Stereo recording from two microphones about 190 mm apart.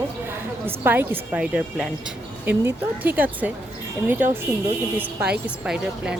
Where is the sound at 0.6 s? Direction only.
10° right (ahead or behind).